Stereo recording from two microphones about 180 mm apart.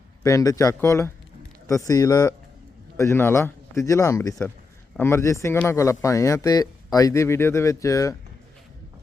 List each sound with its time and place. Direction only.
0.2 s speech: 20° left (ahead or behind)